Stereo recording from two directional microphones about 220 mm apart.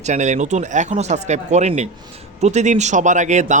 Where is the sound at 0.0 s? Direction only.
30° right (ahead or behind).